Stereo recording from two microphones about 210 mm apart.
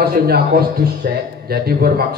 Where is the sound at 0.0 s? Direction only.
45° right (ahead or behind).